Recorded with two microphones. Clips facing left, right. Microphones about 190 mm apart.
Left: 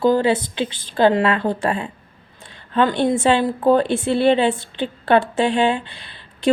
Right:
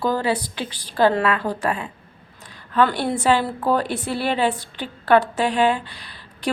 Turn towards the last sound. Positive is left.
turn(degrees=25)  # may be behind; listen again after turning